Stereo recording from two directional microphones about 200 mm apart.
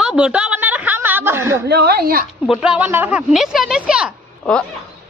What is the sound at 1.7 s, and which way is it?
Speech, 55° right (ahead or behind).